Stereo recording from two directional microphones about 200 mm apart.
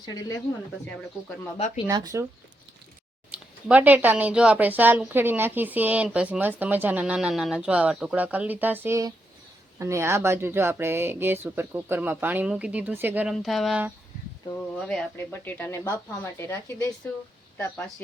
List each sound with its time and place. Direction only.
0.0 s speech: 20° left (ahead or behind)
1.9 s speech: 20° right (ahead or behind)
3.3 s speech: 5° right (ahead or behind); by 16.9 s 10° left (ahead or behind)